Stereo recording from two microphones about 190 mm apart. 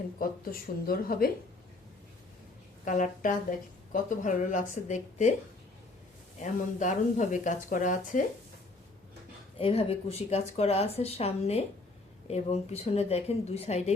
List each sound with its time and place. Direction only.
0.2 s speech: 50° left (ahead or behind)
2.8 s speech: 45° left (ahead or behind)
6.4 s speech: 40° left (ahead or behind)
9.6 s speech: 30° left (ahead or behind)